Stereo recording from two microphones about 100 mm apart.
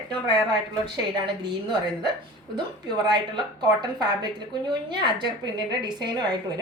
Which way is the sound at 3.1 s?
45° right (ahead or behind).